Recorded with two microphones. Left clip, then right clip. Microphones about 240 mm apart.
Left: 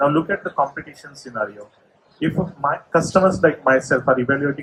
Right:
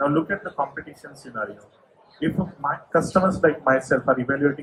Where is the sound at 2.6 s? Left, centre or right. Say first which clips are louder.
Left 3 dB; left.